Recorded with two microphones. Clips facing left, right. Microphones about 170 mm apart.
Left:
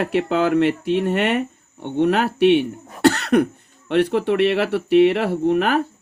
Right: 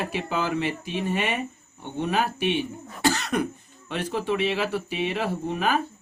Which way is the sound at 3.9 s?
65° left (ahead or behind).